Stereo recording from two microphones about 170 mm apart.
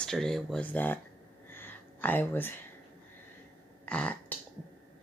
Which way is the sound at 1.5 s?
10° left (ahead or behind).